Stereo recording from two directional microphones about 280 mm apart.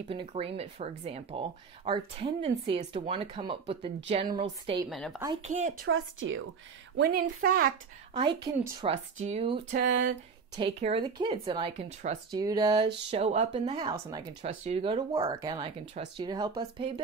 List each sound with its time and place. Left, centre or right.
0.1 s speech: centre
4.8 s speech: centre
5.2 s speech: centre
5.5 s speech: right
5.9 s speech: right
7.0 s a woman's voice: right
8.1 s speech: centre
9.8 s a woman's voice: right
10.5 s speech: centre
12.4 s speech: centre